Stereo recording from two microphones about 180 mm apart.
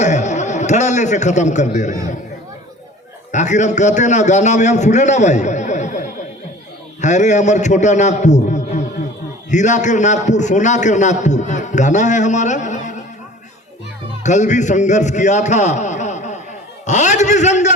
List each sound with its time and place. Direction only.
0.0 s a man's voice: 40° left (ahead or behind)
3.3 s a man's voice: 40° left (ahead or behind)
14.3 s a man's voice: 40° left (ahead or behind)